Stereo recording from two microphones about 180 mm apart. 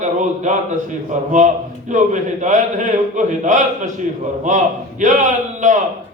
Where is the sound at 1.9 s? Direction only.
45° right (ahead or behind).